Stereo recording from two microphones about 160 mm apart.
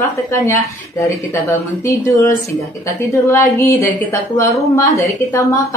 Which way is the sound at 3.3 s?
15° left (ahead or behind).